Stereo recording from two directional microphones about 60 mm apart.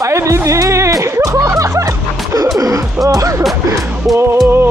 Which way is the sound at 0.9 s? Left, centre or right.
Right.